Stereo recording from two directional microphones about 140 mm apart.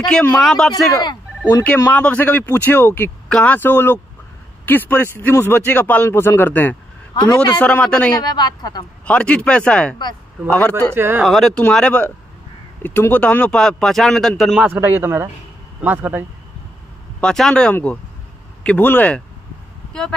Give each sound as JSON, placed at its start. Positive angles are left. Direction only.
{"t": 0.0, "sound": "speech", "side_deg": 5}
{"t": 8.2, "sound": "a woman's voice", "side_deg": 30}
{"t": 9.0, "sound": "speech", "side_deg": 10}
{"t": 11.0, "sound": "a man's voice", "side_deg": -15}
{"t": 11.2, "sound": "speech", "side_deg": 0}
{"t": 14.7, "sound": "a man's voice", "side_deg": -15}
{"t": 17.2, "sound": "speech", "side_deg": 5}